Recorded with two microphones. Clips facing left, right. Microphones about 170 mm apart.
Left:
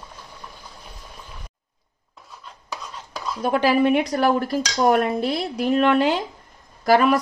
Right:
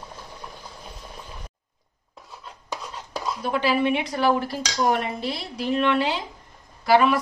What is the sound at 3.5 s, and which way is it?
Speech, 50° left (ahead or behind).